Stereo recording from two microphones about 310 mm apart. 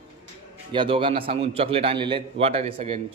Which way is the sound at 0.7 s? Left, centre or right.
Centre.